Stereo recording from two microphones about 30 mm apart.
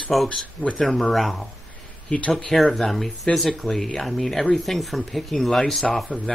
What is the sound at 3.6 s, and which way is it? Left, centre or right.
Speech, centre.